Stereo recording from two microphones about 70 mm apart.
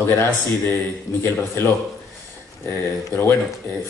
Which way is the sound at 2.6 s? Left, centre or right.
Left.